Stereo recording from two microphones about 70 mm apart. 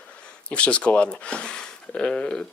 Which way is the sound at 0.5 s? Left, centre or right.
Centre.